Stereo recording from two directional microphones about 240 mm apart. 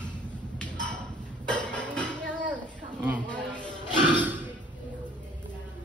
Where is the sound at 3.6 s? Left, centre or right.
Centre.